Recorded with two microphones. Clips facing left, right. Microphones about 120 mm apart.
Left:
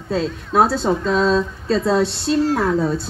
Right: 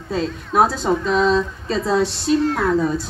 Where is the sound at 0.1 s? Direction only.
5° right (ahead or behind).